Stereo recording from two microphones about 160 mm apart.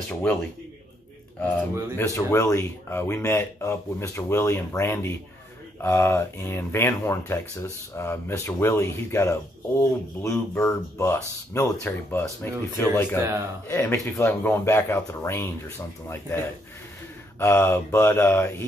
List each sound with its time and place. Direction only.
2.0 s speech: 20° left (ahead or behind)